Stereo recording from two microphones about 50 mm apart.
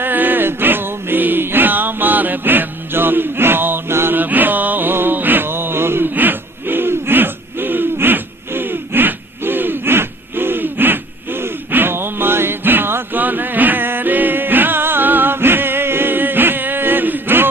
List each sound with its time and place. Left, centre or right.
0.0 s music: right
4.2 s a sound: right
6.1 s hoot: right
13.2 s music: right